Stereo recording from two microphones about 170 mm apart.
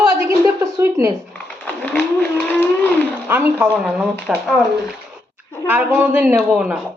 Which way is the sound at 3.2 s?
10° right (ahead or behind).